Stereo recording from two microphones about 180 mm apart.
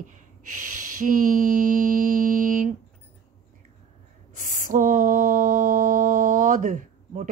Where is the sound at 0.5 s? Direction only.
45° right (ahead or behind).